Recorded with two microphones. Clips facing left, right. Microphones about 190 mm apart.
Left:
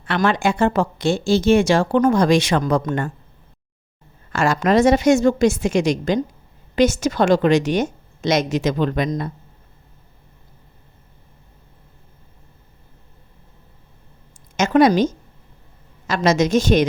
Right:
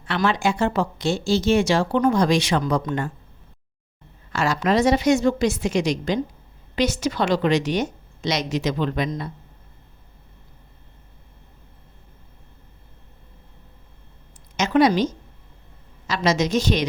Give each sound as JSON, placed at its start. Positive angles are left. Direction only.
{"t": 0.0, "sound": "speech", "side_deg": 55}
{"t": 4.3, "sound": "speech", "side_deg": 50}
{"t": 14.5, "sound": "speech", "side_deg": 50}